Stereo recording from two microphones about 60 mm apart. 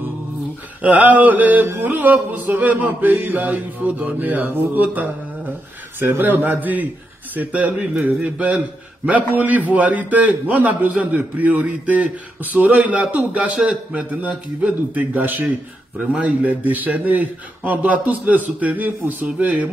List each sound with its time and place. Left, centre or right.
0.8 s a man's voice: right